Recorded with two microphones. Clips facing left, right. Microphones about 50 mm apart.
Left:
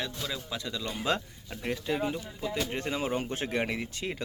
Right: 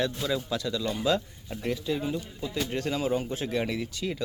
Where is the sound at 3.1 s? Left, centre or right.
Left.